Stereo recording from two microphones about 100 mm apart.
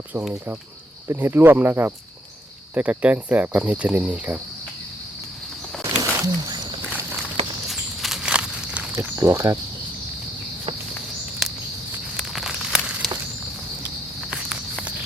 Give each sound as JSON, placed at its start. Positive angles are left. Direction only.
{"t": 1.0, "sound": "cricket", "side_deg": -25}
{"t": 5.8, "sound": "a sound", "side_deg": -35}
{"t": 7.7, "sound": "walk", "side_deg": 0}
{"t": 9.0, "sound": "speech", "side_deg": -30}
{"t": 12.1, "sound": "a sound", "side_deg": -5}
{"t": 14.3, "sound": "walk", "side_deg": 0}